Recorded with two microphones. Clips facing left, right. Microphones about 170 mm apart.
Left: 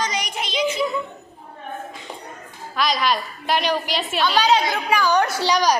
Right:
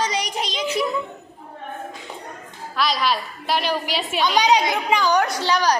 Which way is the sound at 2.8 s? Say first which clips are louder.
Left 1 dB; centre (ahead or behind).